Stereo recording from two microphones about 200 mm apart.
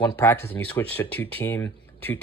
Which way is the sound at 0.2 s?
10° left (ahead or behind).